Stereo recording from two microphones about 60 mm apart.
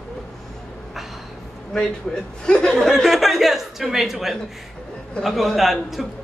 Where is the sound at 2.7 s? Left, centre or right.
Centre.